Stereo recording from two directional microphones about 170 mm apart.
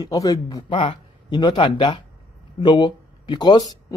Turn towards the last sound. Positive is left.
turn(degrees=25)  # may be behind; listen again after turning